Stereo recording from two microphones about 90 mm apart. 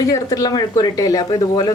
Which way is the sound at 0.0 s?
40° left (ahead or behind).